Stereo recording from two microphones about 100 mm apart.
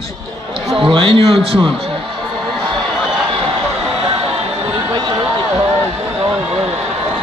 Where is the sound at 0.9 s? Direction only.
65° right (ahead or behind).